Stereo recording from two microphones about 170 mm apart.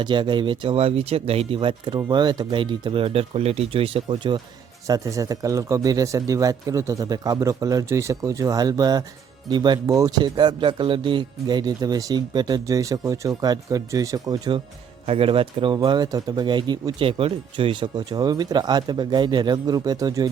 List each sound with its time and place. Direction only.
0.0 s speech: 30° right (ahead or behind)
4.9 s speech: 20° right (ahead or behind)
15.0 s speech: 35° right (ahead or behind)